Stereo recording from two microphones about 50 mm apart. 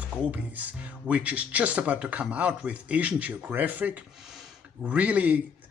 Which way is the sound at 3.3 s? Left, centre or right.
Right.